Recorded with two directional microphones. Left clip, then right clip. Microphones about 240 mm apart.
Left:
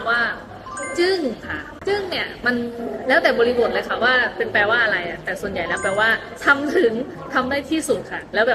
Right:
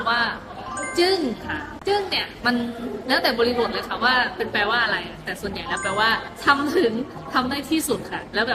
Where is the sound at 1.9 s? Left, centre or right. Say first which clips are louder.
Even; right.